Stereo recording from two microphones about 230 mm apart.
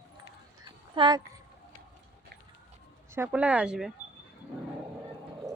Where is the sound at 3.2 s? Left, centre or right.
Centre.